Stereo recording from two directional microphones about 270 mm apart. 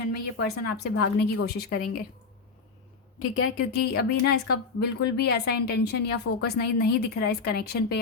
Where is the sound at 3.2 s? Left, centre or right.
Left.